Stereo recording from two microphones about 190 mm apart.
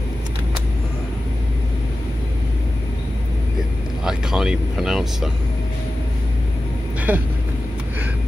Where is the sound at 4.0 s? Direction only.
5° right (ahead or behind).